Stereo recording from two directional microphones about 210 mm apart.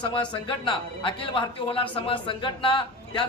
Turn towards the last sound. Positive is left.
turn(degrees=25)  # may be behind; listen again after turning